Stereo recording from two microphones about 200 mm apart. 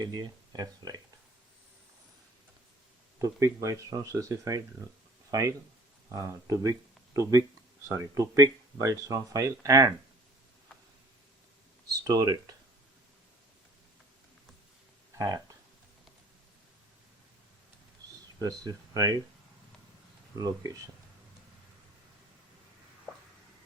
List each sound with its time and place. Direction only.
0.0 s speech: 20° right (ahead or behind)
3.2 s speech: 15° right (ahead or behind)
12.0 s speech: 20° right (ahead or behind)
15.2 s speech: 20° right (ahead or behind)
18.3 s speech: 15° right (ahead or behind)
20.3 s speech: 20° right (ahead or behind)